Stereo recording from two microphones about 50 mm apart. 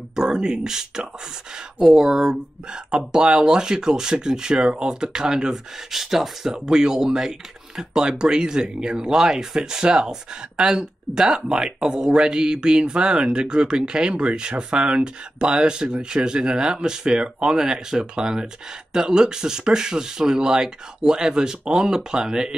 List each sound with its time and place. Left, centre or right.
0.1 s speech: centre